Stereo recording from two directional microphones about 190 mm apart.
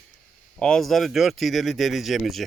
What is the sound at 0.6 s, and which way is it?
Speech, 5° left (ahead or behind).